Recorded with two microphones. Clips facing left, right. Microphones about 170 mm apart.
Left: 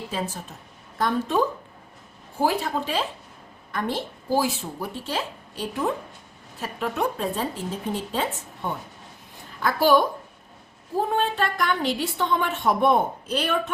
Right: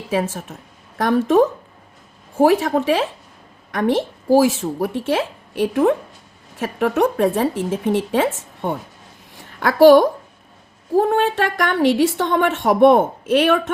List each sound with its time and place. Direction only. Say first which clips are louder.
0.1 s a woman's voice: right 13 dB; 75° right (ahead or behind)
9.3 s a sound: right 5 dB; 75° right (ahead or behind)
10.9 s a woman's voice: right 8 dB; 75° right (ahead or behind)